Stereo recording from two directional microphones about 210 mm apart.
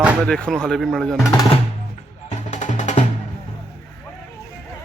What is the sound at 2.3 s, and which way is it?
Music, 35° left (ahead or behind).